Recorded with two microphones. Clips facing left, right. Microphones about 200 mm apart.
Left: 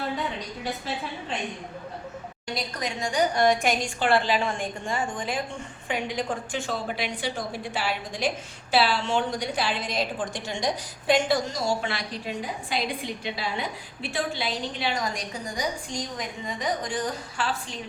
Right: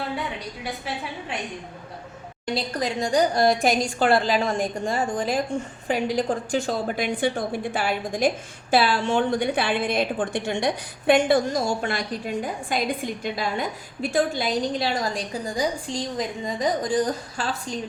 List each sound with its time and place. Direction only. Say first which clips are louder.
2.6 s a woman's voice: right 5 dB; 35° right (ahead or behind)